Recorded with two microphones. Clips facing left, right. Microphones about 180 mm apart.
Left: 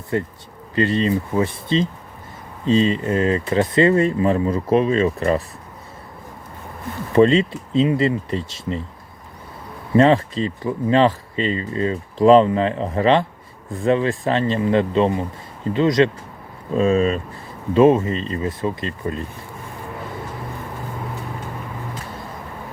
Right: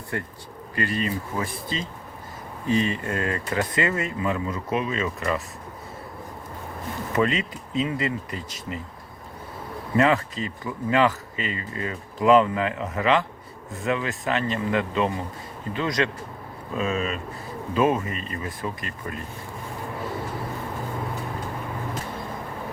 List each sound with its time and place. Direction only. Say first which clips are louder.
0.1 s speech: left 9 dB; 20° left (ahead or behind)
7.2 s speech: left 10 dB; 30° left (ahead or behind)
9.9 s speech: left 6 dB; 30° left (ahead or behind)